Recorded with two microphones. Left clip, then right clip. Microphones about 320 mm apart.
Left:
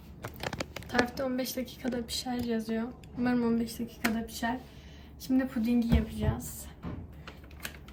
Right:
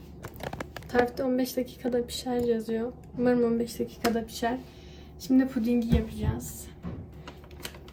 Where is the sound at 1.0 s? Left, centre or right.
Centre.